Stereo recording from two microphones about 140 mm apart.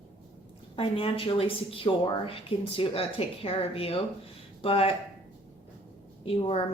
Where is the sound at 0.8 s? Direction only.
40° left (ahead or behind).